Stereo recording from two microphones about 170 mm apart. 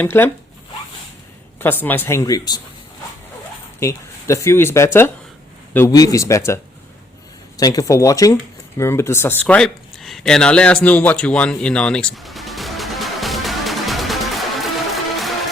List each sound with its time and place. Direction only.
0.0 s speech: 10° left (ahead or behind)
1.5 s speech: 10° left (ahead or behind)
3.8 s speech: 15° left (ahead or behind)
8.8 s a sound: 15° left (ahead or behind)